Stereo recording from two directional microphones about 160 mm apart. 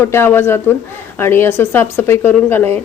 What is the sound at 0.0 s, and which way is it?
A woman's voice, 15° left (ahead or behind).